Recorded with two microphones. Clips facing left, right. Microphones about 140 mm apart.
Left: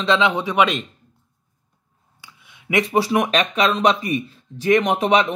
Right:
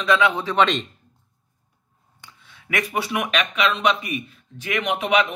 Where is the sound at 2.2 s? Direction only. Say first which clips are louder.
Left 6 dB; 15° left (ahead or behind).